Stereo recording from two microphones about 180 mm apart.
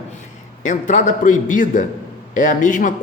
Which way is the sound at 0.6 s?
45° left (ahead or behind).